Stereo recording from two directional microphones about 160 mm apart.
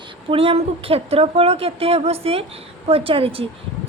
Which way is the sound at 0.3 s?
35° right (ahead or behind).